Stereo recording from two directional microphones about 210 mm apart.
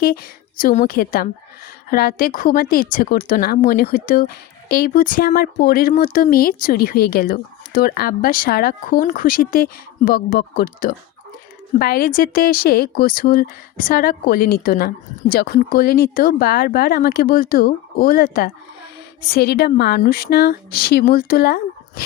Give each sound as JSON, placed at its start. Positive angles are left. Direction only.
{"t": 0.0, "sound": "speech", "side_deg": 45}